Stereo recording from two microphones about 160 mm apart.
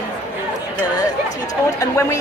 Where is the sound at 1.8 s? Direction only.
20° left (ahead or behind).